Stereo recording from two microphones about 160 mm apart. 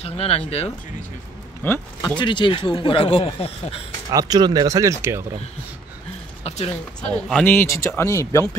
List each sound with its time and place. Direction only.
0.0 s speech: 40° left (ahead or behind)
1.6 s speech: 15° left (ahead or behind)
2.1 s speech: 30° left (ahead or behind)
4.1 s speech: 25° right (ahead or behind)
6.4 s speech: 40° left (ahead or behind)
7.0 s speech: 5° left (ahead or behind)